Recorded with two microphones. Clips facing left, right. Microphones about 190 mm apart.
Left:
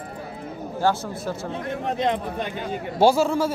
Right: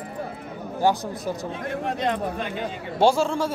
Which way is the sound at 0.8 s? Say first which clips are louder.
Right 1 dB; 15° right (ahead or behind).